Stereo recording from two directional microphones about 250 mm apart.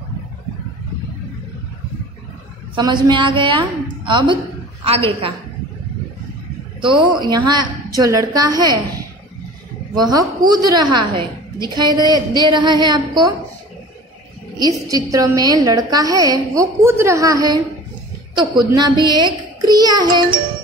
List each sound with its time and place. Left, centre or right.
2.7 s a woman's voice: centre
6.8 s a woman's voice: centre
10.1 s a woman's voice: centre
14.6 s a woman's voice: centre